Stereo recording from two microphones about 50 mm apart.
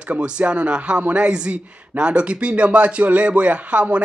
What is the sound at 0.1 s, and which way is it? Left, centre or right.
A man's voice, right.